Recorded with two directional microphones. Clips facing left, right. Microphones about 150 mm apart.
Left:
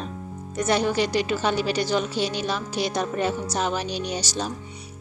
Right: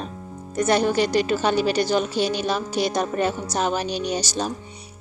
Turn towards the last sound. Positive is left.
turn(degrees=-50)  # may be behind; listen again after turning